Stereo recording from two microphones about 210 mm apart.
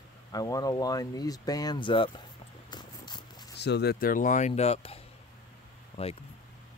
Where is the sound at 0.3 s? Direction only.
20° left (ahead or behind).